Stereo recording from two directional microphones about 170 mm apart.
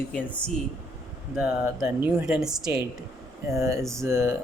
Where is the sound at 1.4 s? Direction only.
5° right (ahead or behind).